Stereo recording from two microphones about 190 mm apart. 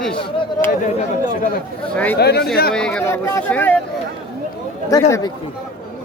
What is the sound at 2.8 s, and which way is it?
Speech, 5° left (ahead or behind).